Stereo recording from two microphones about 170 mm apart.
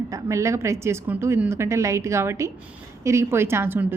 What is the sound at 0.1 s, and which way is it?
A woman's voice, 15° right (ahead or behind).